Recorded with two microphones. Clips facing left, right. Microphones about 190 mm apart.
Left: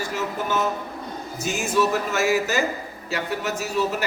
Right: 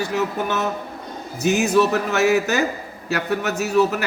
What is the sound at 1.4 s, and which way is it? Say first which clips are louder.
A man's voice: right 6 dB; 65° right (ahead or behind).